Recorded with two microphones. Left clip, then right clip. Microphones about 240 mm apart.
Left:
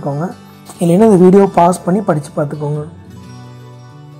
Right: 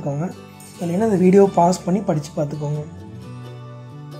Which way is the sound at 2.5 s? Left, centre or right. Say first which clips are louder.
Left 7 dB; centre.